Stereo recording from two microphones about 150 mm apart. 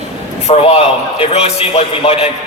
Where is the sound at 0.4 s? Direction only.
45° left (ahead or behind).